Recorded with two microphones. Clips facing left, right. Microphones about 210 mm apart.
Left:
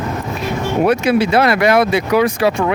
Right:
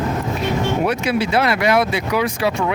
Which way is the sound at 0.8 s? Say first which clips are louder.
Left 5 dB; 50° left (ahead or behind).